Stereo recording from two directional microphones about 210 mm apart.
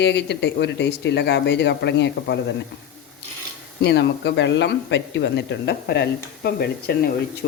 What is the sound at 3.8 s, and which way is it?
Speech, 55° left (ahead or behind).